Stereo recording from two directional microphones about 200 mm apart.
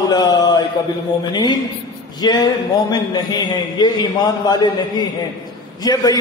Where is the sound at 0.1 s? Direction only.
20° left (ahead or behind).